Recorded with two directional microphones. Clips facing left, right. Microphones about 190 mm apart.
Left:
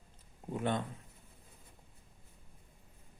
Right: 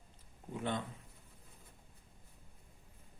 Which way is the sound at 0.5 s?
50° left (ahead or behind).